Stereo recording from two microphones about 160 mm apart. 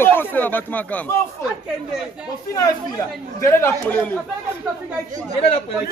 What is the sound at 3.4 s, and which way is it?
Speech, 15° left (ahead or behind).